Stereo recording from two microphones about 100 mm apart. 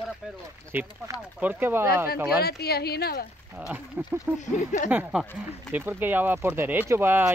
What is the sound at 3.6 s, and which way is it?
Speech, 15° right (ahead or behind).